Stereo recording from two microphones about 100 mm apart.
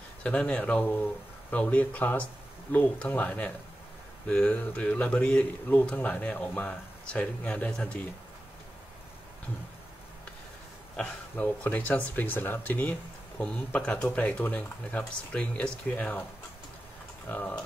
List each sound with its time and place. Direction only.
0.2 s speech: 10° left (ahead or behind)
11.0 s speech: 15° left (ahead or behind)
17.3 s speech: 20° left (ahead or behind)